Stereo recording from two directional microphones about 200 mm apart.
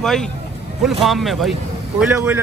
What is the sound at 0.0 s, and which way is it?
A man's voice, 5° left (ahead or behind).